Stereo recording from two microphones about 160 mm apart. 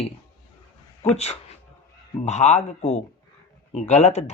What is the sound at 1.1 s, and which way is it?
Speech, 40° left (ahead or behind).